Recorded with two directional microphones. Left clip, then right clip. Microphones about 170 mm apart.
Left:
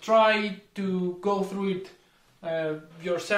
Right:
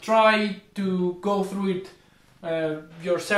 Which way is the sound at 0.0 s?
30° left (ahead or behind).